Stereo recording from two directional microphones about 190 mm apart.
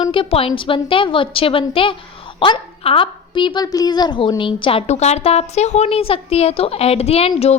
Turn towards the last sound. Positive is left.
turn(degrees=30)  # may be behind; listen again after turning